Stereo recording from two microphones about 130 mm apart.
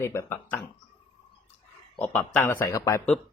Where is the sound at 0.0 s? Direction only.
20° left (ahead or behind).